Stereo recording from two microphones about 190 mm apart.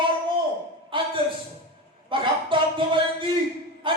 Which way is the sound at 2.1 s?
25° right (ahead or behind).